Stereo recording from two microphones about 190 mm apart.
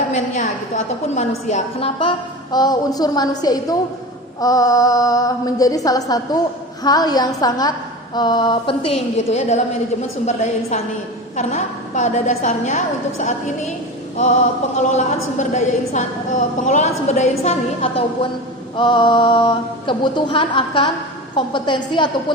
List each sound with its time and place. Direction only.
0.1 s a woman's voice: 40° left (ahead or behind)
2.0 s mantra: 25° left (ahead or behind)
10.2 s a woman's voice: 35° left (ahead or behind)
14.8 s a woman's voice: 35° left (ahead or behind)
18.8 s mantra: 25° left (ahead or behind)